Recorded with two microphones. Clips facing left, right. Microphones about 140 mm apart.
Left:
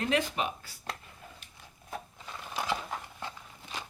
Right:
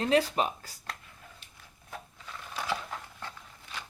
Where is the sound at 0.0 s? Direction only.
35° right (ahead or behind).